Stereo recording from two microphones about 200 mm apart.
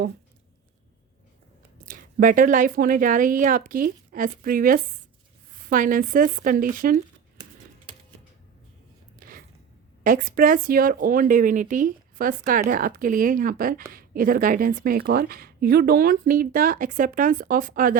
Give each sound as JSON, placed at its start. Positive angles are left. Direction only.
{"t": 1.8, "sound": "speech", "side_deg": -40}
{"t": 10.0, "sound": "speech", "side_deg": -45}